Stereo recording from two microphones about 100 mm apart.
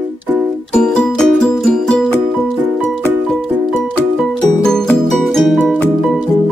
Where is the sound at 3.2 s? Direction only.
Centre (ahead or behind).